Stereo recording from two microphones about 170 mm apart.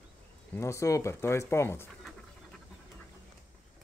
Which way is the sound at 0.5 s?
15° left (ahead or behind).